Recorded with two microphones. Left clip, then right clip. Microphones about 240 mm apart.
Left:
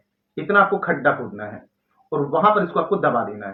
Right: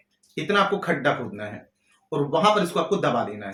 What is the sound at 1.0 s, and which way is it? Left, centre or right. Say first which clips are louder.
Speech: left 4 dB; right.